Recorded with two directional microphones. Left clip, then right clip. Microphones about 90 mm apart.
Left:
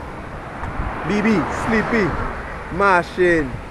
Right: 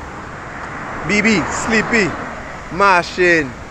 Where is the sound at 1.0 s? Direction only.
5° right (ahead or behind).